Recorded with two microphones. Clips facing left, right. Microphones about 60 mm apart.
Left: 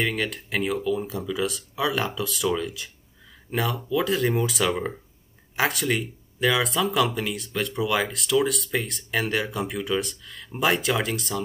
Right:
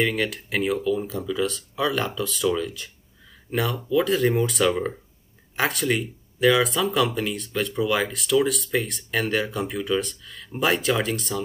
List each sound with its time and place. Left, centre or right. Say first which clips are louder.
0.0 s speech: right 3 dB; centre